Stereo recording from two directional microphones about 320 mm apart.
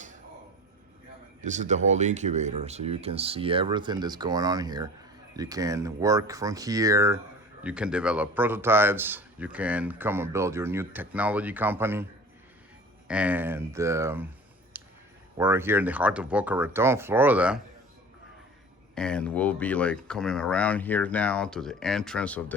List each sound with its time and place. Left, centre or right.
1.4 s a man's voice: right
13.1 s speech: centre
14.7 s a sound: centre
15.4 s speech: centre
18.9 s a man's voice: centre